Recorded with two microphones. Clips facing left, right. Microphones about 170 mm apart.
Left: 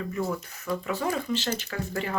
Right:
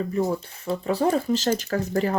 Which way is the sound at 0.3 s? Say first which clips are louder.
Right 4 dB; 30° right (ahead or behind).